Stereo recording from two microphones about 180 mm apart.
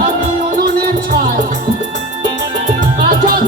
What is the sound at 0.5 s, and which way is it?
Music, 50° right (ahead or behind).